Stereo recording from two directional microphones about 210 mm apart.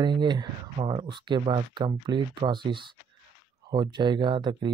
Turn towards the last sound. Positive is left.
turn(degrees=-20)  # may be behind; listen again after turning